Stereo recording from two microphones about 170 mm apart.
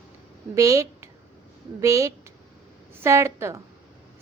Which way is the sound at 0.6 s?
20° right (ahead or behind).